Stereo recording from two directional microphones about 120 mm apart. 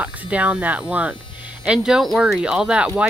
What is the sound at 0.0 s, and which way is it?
Speech, 10° right (ahead or behind).